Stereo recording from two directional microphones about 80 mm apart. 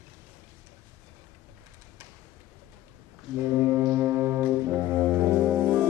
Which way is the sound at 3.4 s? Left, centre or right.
Right.